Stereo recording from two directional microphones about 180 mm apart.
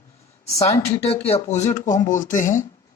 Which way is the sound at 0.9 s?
35° left (ahead or behind).